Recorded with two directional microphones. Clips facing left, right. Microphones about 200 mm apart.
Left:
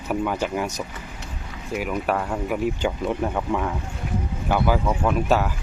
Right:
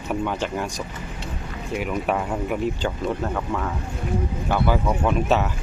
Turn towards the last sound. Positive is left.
turn(degrees=0)  # may be behind; listen again after turning